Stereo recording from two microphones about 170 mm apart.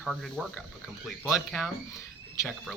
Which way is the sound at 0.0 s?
Centre (ahead or behind).